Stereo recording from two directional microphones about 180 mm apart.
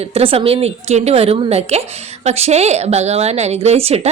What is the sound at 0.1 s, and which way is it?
A woman's voice, 30° right (ahead or behind).